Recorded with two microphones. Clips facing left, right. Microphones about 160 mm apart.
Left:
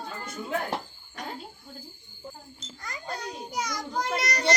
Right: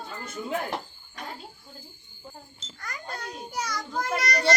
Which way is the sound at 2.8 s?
20° left (ahead or behind).